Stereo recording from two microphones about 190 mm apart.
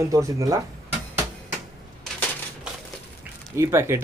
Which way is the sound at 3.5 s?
15° right (ahead or behind).